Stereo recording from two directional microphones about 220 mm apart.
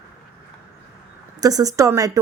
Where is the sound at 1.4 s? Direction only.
15° right (ahead or behind).